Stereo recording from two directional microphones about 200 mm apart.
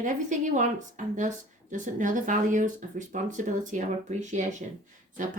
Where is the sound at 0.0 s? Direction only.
40° right (ahead or behind).